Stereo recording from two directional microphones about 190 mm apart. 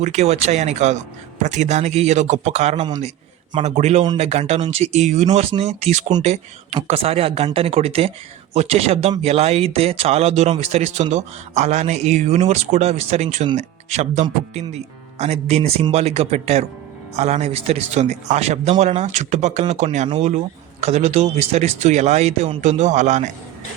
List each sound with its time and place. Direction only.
0.0 s speech: 35° right (ahead or behind)